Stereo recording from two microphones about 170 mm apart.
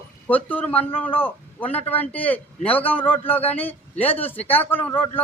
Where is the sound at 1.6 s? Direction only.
35° left (ahead or behind).